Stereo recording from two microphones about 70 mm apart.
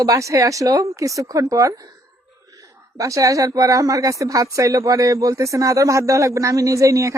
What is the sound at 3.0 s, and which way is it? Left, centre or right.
Speech, right.